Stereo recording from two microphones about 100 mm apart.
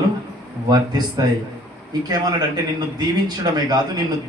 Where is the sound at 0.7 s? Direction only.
45° right (ahead or behind).